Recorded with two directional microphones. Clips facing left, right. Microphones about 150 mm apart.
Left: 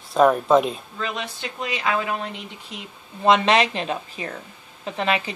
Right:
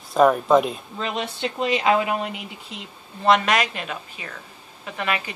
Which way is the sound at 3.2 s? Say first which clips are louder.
Left 2 dB; 25° left (ahead or behind).